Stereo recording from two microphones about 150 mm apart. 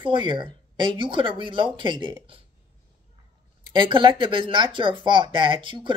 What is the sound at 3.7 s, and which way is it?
Speech, 30° right (ahead or behind).